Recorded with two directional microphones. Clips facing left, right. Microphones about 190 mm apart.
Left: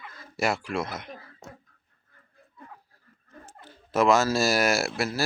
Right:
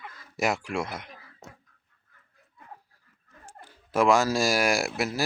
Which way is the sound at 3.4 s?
10° right (ahead or behind).